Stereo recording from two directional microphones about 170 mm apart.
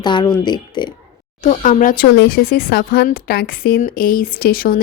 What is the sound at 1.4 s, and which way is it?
Speech, 45° left (ahead or behind).